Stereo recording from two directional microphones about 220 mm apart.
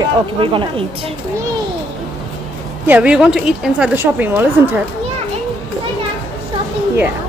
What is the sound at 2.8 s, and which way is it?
A woman's voice, 5° right (ahead or behind).